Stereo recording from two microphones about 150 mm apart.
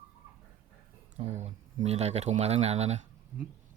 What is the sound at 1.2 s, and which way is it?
Speech, 50° right (ahead or behind).